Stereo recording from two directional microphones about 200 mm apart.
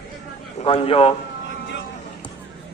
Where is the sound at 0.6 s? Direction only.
30° left (ahead or behind).